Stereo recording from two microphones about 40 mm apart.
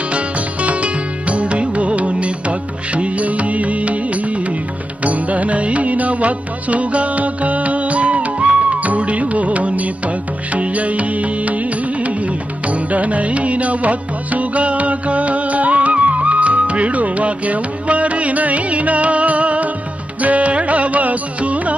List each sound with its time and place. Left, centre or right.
0.1 s music: right